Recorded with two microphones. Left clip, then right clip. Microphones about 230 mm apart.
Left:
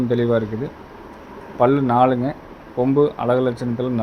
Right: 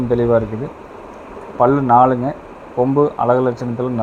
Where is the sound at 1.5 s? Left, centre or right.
Centre.